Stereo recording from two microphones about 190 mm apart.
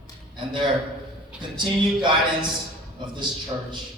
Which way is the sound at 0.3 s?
25° right (ahead or behind).